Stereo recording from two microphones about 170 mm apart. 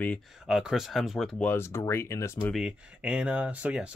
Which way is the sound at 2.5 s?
5° right (ahead or behind).